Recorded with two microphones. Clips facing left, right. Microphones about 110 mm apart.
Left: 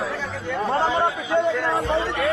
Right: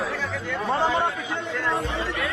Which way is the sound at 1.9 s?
75° left (ahead or behind).